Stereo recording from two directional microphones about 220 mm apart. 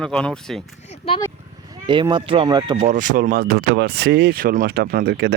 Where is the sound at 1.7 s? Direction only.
20° right (ahead or behind).